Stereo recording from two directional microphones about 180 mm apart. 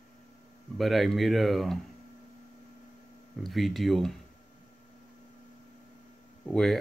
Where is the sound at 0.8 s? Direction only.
Centre (ahead or behind).